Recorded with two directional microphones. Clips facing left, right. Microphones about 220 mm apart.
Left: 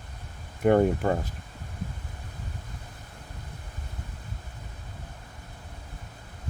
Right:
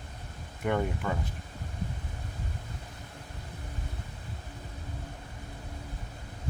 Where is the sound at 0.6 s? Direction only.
45° left (ahead or behind).